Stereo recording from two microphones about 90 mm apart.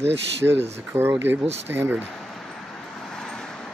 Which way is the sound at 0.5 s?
25° right (ahead or behind).